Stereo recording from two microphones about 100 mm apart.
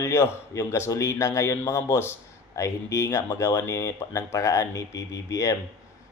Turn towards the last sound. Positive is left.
turn(degrees=30)  # may be behind; listen again after turning